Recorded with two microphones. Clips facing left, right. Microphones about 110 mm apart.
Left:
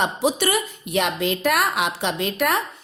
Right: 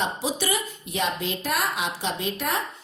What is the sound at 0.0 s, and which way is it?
A woman's voice, 60° left (ahead or behind).